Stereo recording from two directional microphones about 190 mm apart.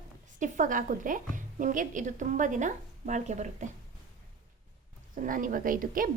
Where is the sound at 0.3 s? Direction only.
40° right (ahead or behind).